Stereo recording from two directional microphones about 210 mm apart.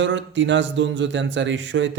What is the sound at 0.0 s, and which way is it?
A man's voice, 60° right (ahead or behind).